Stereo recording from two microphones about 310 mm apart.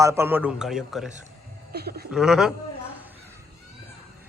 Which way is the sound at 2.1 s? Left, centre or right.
Centre.